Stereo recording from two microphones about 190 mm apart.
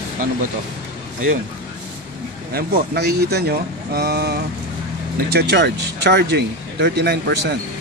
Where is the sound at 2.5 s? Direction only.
55° right (ahead or behind).